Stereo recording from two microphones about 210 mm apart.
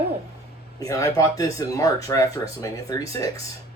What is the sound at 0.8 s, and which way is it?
Speech, 15° left (ahead or behind).